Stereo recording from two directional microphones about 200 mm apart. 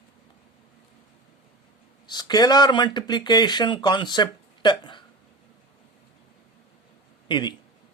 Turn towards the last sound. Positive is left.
turn(degrees=20)  # may be behind; listen again after turning